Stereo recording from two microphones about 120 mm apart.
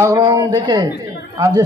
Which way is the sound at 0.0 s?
35° right (ahead or behind).